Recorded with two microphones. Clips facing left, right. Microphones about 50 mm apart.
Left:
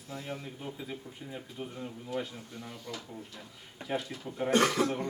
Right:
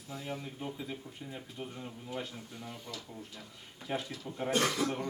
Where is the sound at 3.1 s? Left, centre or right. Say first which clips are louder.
Left 2 dB; centre.